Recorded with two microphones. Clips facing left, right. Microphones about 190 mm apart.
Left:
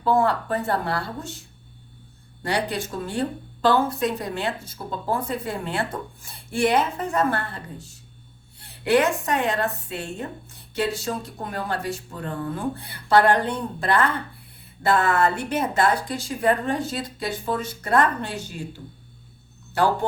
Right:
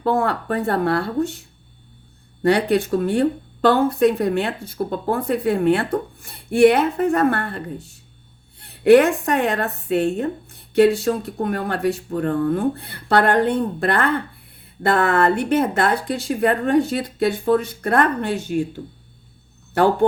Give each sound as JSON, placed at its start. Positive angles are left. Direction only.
{"t": 0.0, "sound": "speech", "side_deg": -55}
{"t": 2.4, "sound": "speech", "side_deg": -60}
{"t": 19.7, "sound": "speech", "side_deg": -55}